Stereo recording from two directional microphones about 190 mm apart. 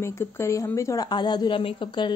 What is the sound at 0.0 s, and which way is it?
A woman's voice, 15° left (ahead or behind).